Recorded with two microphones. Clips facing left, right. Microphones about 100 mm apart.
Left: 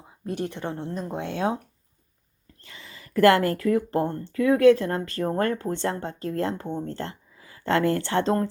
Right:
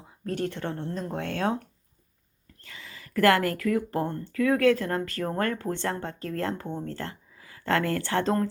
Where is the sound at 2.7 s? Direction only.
25° left (ahead or behind).